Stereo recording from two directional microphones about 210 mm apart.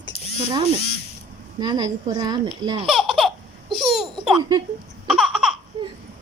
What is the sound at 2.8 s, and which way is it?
Laughter, centre (ahead or behind).